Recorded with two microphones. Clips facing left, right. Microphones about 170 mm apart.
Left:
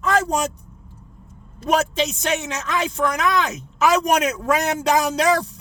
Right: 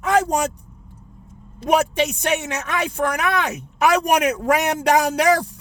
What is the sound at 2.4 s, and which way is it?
Speech, 60° right (ahead or behind).